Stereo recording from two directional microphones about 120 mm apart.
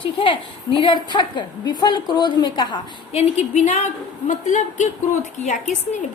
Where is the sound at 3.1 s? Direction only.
65° left (ahead or behind); by 5.8 s 80° left.